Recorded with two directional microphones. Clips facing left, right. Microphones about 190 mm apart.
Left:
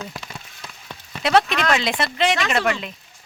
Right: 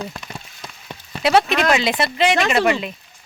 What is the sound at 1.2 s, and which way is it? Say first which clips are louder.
Speech: right 2 dB; 5° right (ahead or behind).